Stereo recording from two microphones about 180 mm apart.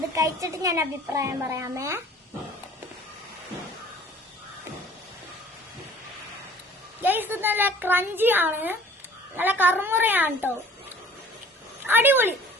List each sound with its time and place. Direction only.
0.1 s a woman's voice: 20° right (ahead or behind)
7.0 s a woman's voice: 10° right (ahead or behind)
11.9 s a woman's voice: 10° right (ahead or behind)